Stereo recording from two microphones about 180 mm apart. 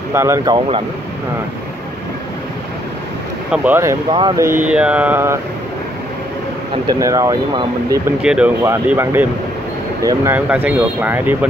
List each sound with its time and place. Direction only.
0.1 s speech: 15° right (ahead or behind)
0.6 s speech: 30° right (ahead or behind)
3.5 s speech: 10° right (ahead or behind)
4.6 s speech: 5° right (ahead or behind)
6.9 s speech: 20° right (ahead or behind)
8.2 s speech: 5° right (ahead or behind)